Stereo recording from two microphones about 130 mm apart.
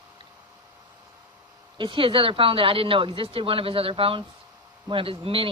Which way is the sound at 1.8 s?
40° right (ahead or behind).